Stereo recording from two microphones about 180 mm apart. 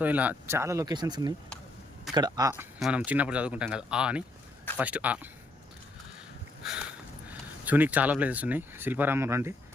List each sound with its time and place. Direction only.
0.0 s speech: 10° right (ahead or behind)
7.3 s speech: 10° right (ahead or behind)